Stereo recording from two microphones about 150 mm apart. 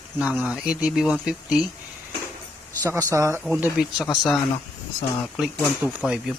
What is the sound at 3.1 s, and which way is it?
Speech, 20° right (ahead or behind).